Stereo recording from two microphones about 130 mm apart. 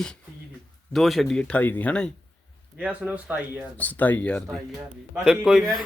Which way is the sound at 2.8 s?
10° right (ahead or behind).